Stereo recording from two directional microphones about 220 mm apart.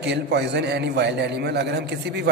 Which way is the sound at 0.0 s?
50° right (ahead or behind).